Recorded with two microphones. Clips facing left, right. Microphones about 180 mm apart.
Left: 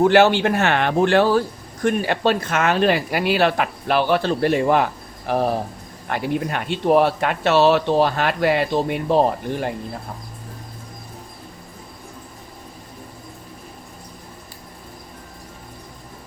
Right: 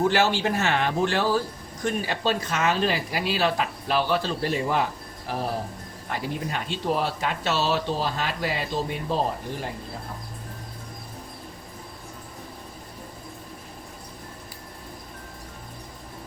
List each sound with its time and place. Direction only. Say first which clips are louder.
0.0 s speech: left 8 dB; 65° left (ahead or behind)